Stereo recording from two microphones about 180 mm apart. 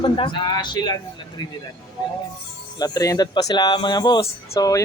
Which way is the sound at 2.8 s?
20° left (ahead or behind).